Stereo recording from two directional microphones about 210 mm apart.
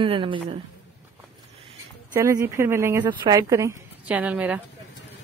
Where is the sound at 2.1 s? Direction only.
15° right (ahead or behind).